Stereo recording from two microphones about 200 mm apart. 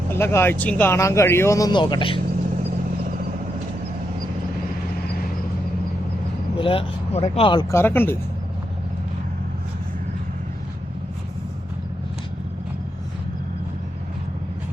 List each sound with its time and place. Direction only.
0.1 s speech: 10° left (ahead or behind)
5.0 s vehicle: 50° left (ahead or behind)
6.6 s speech: 25° left (ahead or behind); by 8.2 s 10° left (ahead or behind)